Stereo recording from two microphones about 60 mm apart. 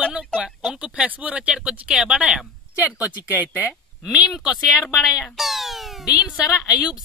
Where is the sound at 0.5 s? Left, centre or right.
Centre.